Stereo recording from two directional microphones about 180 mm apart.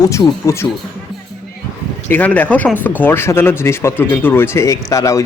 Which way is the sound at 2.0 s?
10° left (ahead or behind).